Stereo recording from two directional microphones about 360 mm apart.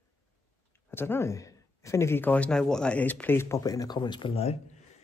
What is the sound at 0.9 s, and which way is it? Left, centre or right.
Speech, centre.